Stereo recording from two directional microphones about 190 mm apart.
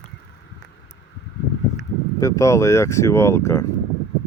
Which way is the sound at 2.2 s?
15° left (ahead or behind).